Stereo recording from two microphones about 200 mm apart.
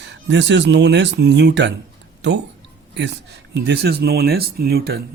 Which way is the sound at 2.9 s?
60° right (ahead or behind).